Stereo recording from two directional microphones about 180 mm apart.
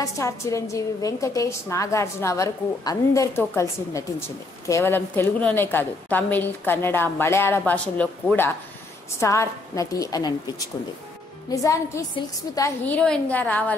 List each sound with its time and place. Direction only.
0.0 s a woman's voice: 15° left (ahead or behind)
11.5 s a woman's voice: 20° left (ahead or behind)